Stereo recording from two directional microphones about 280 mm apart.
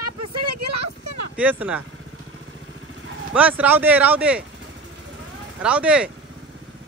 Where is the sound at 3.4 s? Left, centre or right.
Centre.